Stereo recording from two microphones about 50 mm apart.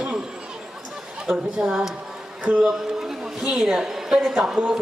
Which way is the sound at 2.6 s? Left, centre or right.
Centre.